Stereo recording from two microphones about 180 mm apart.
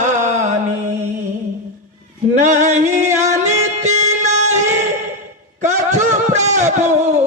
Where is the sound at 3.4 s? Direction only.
40° right (ahead or behind).